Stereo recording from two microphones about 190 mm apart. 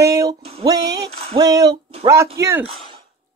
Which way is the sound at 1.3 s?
20° right (ahead or behind).